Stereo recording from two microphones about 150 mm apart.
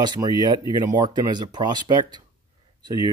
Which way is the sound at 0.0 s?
30° right (ahead or behind).